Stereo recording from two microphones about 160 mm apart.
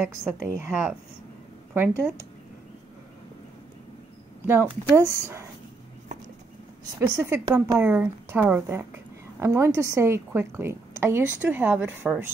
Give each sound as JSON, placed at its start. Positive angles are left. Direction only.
{"t": 0.2, "sound": "a woman's voice", "side_deg": -5}
{"t": 4.9, "sound": "a woman's voice", "side_deg": -15}
{"t": 7.0, "sound": "a woman's voice", "side_deg": -15}